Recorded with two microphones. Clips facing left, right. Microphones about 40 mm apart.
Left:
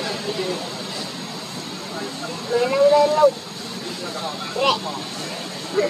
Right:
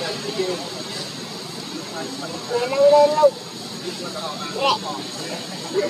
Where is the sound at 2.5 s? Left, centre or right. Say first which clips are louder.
Right 1 dB; centre.